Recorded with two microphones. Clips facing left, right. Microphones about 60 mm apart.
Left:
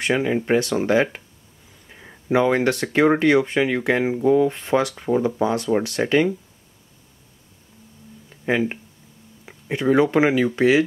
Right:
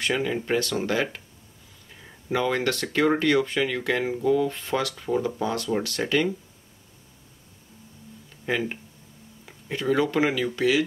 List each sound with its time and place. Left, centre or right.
0.0 s speech: left
8.5 s speech: left